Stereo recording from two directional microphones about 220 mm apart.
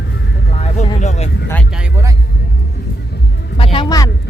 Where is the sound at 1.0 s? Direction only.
30° left (ahead or behind).